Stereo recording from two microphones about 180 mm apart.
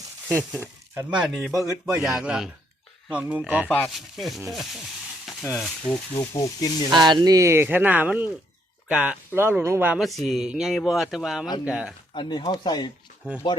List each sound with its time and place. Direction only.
0.3 s speech: 5° right (ahead or behind)
3.7 s speech: 5° left (ahead or behind)
5.2 s a sound: centre (ahead or behind)
5.9 s speech: 20° left (ahead or behind)
6.9 s speech: 25° right (ahead or behind); by 11.9 s 5° right (ahead or behind)
12.1 s speech: 25° left (ahead or behind)